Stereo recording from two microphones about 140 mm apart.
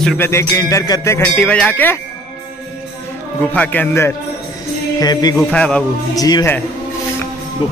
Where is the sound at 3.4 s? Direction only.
10° left (ahead or behind).